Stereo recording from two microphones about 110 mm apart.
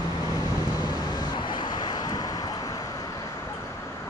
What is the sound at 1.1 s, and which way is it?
Vehicle, 45° left (ahead or behind).